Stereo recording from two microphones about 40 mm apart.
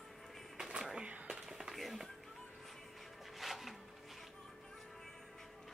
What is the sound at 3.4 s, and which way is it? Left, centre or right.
Music, centre.